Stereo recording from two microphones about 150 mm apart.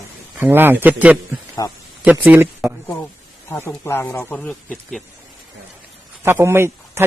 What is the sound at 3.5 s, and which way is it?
Speech, 15° left (ahead or behind).